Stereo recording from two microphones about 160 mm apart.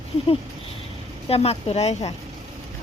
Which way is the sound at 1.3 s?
40° left (ahead or behind).